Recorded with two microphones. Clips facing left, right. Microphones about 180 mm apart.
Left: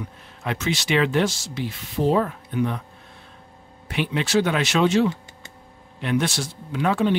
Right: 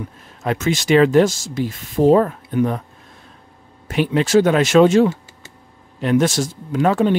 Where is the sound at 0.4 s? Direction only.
45° right (ahead or behind).